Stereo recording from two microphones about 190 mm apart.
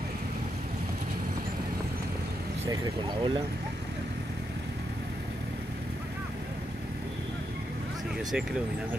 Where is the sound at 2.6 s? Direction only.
25° right (ahead or behind).